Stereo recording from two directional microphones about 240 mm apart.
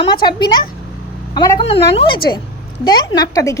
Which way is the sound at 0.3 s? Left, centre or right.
Centre.